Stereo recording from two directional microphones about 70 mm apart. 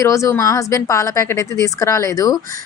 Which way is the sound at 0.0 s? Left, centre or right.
Left.